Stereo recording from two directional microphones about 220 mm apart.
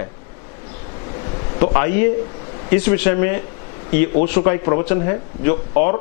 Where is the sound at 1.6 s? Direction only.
15° left (ahead or behind).